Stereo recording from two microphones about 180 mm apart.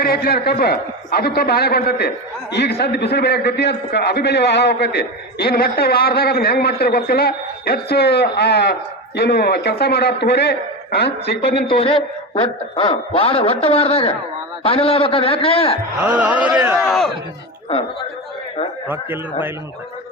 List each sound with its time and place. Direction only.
0.0 s a man's voice: 55° left (ahead or behind)
11.7 s a man's voice: 30° left (ahead or behind)
16.0 s a man's voice: 10° right (ahead or behind)
18.9 s a man's voice: 10° right (ahead or behind)